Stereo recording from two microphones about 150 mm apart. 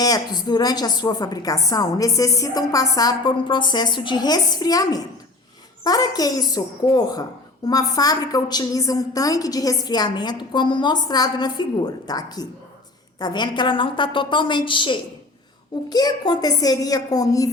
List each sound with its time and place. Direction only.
0.0 s a woman's voice: 25° left (ahead or behind)